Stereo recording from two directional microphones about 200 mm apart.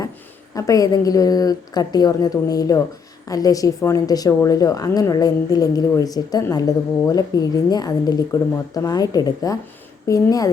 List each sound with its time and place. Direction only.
0.5 s a woman's voice: 15° left (ahead or behind)